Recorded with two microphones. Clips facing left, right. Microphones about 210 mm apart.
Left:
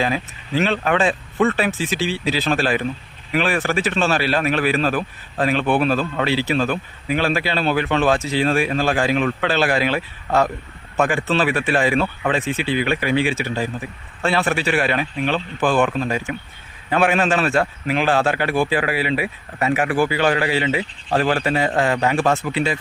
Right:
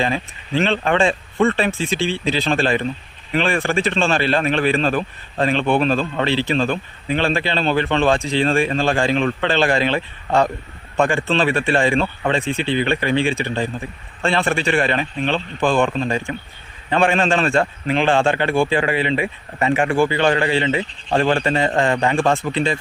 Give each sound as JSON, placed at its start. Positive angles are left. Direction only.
{"t": 0.0, "sound": "speech", "side_deg": 5}